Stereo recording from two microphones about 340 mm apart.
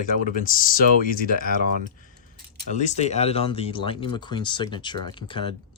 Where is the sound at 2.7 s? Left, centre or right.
Left.